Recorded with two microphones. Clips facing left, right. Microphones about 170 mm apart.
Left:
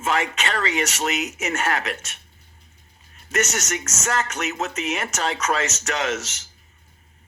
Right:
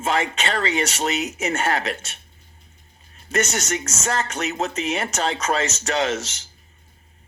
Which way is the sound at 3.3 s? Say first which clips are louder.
Right 2 dB; 30° right (ahead or behind).